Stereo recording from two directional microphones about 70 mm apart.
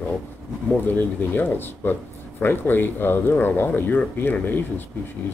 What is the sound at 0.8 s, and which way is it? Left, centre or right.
Speech, left.